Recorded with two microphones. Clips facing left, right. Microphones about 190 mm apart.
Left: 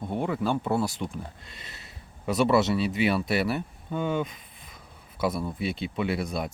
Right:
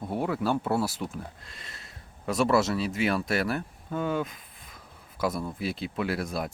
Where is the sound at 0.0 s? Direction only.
5° right (ahead or behind).